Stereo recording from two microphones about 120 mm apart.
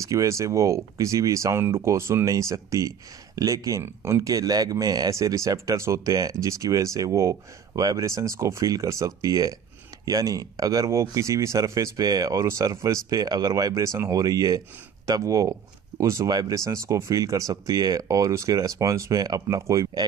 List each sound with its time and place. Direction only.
0.0 s speech: 25° right (ahead or behind)